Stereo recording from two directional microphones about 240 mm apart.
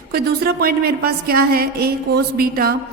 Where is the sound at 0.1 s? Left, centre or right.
Right.